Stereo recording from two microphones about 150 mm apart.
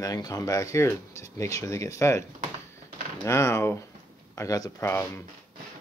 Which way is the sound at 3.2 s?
20° left (ahead or behind).